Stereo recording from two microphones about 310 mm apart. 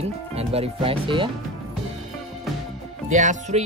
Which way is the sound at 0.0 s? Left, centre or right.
Centre.